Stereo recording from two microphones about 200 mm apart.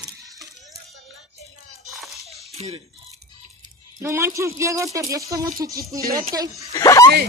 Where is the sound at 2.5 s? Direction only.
30° right (ahead or behind).